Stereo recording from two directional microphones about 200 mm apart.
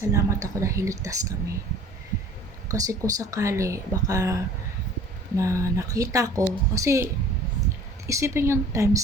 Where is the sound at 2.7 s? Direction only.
15° right (ahead or behind).